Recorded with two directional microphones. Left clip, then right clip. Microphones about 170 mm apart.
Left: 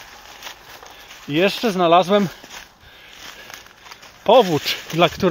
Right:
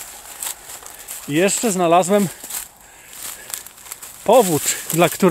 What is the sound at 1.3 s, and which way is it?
Speech, 10° right (ahead or behind).